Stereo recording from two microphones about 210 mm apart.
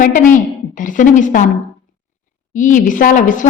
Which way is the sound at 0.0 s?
40° left (ahead or behind).